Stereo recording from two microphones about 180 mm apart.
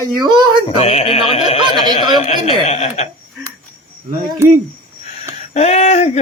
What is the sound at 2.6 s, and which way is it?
Speech, 40° left (ahead or behind).